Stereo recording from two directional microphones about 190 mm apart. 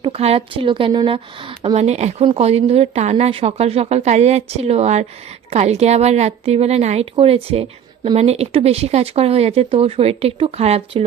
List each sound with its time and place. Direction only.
0.0 s a woman's voice: 30° right (ahead or behind)